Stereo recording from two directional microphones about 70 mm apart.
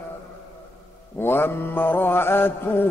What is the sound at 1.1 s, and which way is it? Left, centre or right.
Mantra, left.